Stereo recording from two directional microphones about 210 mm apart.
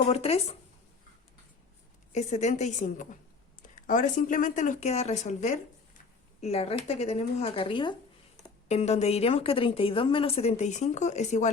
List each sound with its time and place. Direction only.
0.0 s a woman's voice: 30° left (ahead or behind)
2.1 s a woman's voice: 35° left (ahead or behind)